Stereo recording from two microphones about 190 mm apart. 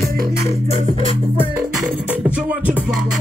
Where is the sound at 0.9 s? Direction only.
30° left (ahead or behind).